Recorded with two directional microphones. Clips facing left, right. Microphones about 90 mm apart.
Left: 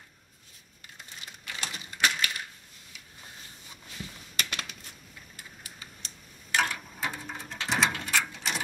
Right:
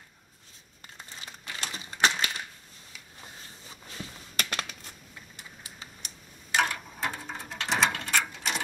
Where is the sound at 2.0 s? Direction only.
30° right (ahead or behind).